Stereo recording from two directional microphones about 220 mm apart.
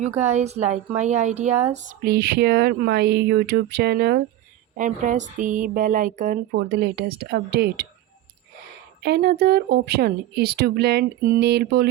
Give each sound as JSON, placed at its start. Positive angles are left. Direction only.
{"t": 0.2, "sound": "speech", "side_deg": -30}
{"t": 2.0, "sound": "speech", "side_deg": -45}
{"t": 4.8, "sound": "speech", "side_deg": -35}
{"t": 9.0, "sound": "speech", "side_deg": -45}